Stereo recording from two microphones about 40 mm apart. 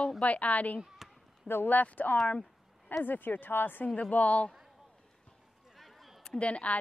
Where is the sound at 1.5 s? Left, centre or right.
Left.